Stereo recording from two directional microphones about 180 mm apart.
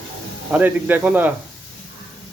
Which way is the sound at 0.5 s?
10° right (ahead or behind).